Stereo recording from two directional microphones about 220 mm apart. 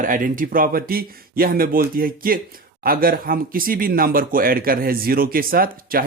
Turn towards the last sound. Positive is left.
turn(degrees=-40)  # may be behind; listen again after turning